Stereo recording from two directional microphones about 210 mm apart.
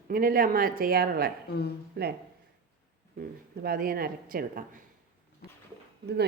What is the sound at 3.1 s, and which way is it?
A woman's voice, 45° right (ahead or behind).